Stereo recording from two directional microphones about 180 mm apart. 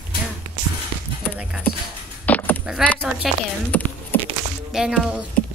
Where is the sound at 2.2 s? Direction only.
10° left (ahead or behind).